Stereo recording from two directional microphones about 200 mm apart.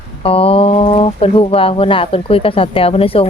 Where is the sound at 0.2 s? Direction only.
30° left (ahead or behind).